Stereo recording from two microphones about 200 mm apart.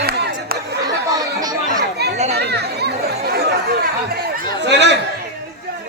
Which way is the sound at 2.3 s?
55° right (ahead or behind).